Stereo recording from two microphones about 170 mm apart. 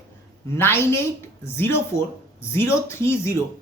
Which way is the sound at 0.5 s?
15° left (ahead or behind).